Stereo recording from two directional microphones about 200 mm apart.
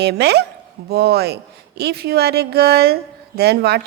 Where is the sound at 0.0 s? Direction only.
55° right (ahead or behind).